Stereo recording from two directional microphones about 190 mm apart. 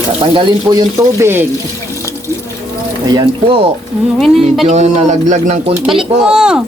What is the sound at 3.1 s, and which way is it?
Speech, 25° right (ahead or behind).